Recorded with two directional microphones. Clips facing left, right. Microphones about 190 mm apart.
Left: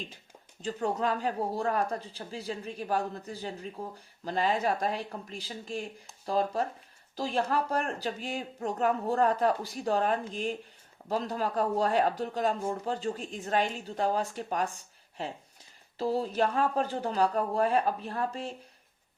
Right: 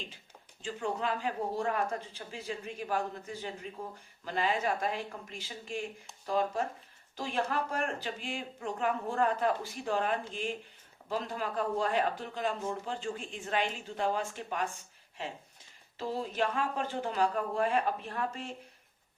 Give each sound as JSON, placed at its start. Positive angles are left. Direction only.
{"t": 0.6, "sound": "speech", "side_deg": 40}
{"t": 16.0, "sound": "speech", "side_deg": 35}